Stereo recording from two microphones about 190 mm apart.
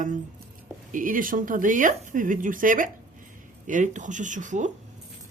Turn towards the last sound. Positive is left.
turn(degrees=-40)  # may be behind; listen again after turning